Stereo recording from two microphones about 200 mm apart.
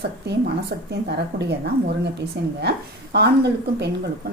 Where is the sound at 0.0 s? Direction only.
55° right (ahead or behind).